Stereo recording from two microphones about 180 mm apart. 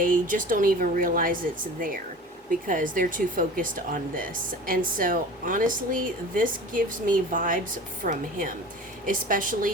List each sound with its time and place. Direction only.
0.0 s a woman's voice: 50° right (ahead or behind)